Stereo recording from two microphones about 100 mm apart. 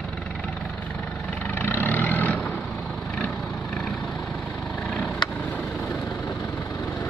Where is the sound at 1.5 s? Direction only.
20° left (ahead or behind).